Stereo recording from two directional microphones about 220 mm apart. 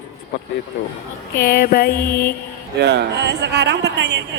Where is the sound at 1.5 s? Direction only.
40° left (ahead or behind).